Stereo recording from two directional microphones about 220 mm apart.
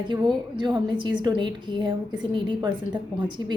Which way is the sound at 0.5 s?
20° right (ahead or behind).